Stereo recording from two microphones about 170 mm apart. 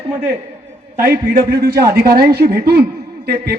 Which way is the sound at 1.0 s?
60° right (ahead or behind).